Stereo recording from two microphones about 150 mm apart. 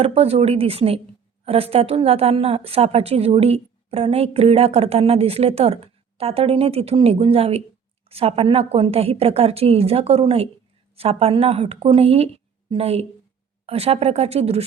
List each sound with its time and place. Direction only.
0.0 s a woman's voice: 40° right (ahead or behind)